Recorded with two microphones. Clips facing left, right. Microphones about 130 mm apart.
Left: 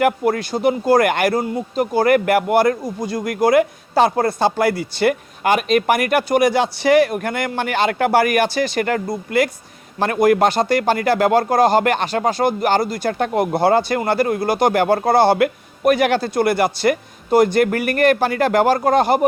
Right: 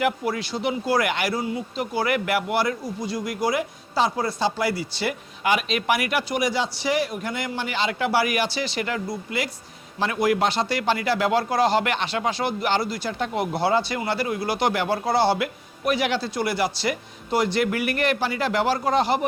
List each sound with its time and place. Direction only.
0.0 s speech: 50° left (ahead or behind)